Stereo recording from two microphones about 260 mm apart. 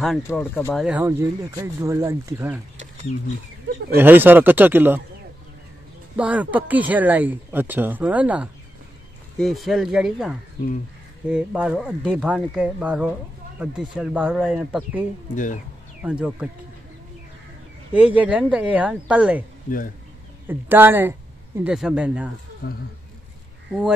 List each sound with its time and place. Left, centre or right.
0.0 s speech: centre
0.8 s speech: centre
3.1 s speech: left
3.9 s speech: centre
6.1 s speech: centre
15.3 s speech: left
16.0 s speech: centre
17.9 s speech: centre
19.7 s speech: left
20.4 s speech: centre
22.6 s speech: left